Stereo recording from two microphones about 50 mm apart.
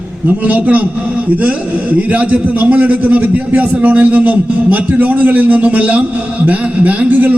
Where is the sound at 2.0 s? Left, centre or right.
Right.